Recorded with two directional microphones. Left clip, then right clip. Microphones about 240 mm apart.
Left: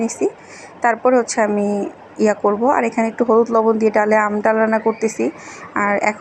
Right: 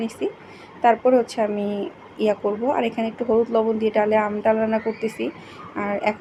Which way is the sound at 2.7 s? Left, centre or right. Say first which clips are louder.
Left 6 dB; centre.